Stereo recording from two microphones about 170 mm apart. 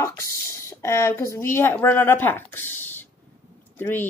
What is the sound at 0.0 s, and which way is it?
A woman's voice, 15° left (ahead or behind).